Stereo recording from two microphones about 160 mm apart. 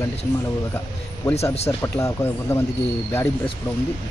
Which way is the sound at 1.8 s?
15° left (ahead or behind).